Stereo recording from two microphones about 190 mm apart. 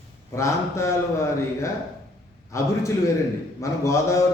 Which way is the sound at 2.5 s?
15° left (ahead or behind).